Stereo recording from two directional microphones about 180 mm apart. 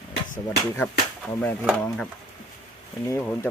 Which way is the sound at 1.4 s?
5° left (ahead or behind).